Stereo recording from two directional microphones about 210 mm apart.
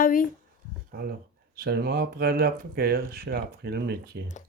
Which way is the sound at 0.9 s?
50° right (ahead or behind).